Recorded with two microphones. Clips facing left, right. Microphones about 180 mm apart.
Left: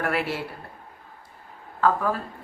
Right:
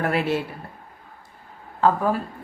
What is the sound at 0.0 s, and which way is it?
Speech, 20° right (ahead or behind).